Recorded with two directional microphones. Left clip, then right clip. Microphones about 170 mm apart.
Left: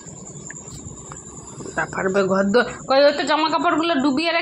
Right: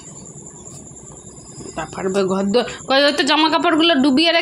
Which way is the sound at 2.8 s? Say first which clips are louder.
Right 2 dB; 70° right (ahead or behind).